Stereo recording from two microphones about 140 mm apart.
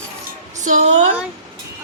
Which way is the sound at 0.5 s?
60° right (ahead or behind).